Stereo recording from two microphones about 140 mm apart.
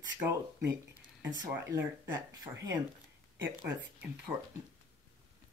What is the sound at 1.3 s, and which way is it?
Speech, 30° right (ahead or behind).